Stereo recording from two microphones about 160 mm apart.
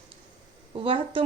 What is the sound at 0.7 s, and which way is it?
Speech, 35° right (ahead or behind).